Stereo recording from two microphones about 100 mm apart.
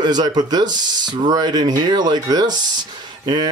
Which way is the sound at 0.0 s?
45° right (ahead or behind).